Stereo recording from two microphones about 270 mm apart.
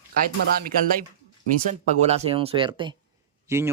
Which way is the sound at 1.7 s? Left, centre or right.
Right.